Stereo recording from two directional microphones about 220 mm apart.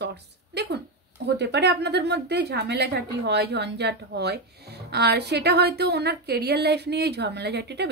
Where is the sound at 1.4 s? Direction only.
50° right (ahead or behind).